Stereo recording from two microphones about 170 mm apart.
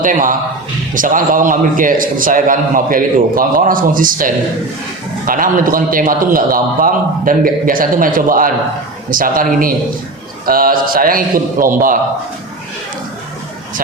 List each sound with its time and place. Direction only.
0.0 s a man's voice: 55° right (ahead or behind)